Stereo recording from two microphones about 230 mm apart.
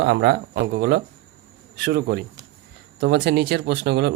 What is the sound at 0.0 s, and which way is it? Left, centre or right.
Speech, right.